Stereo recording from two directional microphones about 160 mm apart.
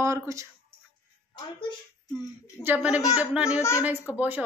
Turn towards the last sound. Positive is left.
turn(degrees=-10)  # may be behind; listen again after turning